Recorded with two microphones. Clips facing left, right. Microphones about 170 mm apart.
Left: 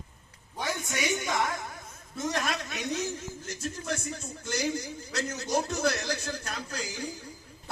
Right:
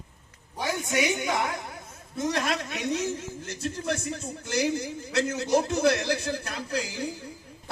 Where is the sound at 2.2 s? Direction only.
30° right (ahead or behind).